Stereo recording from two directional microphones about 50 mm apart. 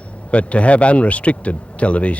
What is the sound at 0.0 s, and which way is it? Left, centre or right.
A man's voice, left.